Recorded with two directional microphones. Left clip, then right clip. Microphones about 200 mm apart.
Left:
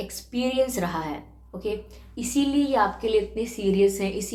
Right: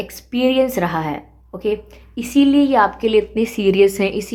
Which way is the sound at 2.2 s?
50° right (ahead or behind).